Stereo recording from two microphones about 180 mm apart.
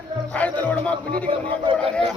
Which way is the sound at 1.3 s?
30° right (ahead or behind).